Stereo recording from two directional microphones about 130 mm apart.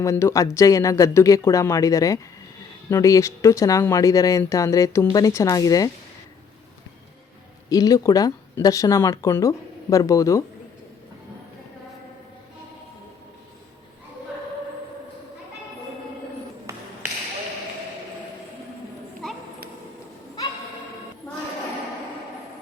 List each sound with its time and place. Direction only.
0.0 s speech: 20° left (ahead or behind)
7.7 s speech: 25° left (ahead or behind)
16.7 s tap: 25° right (ahead or behind)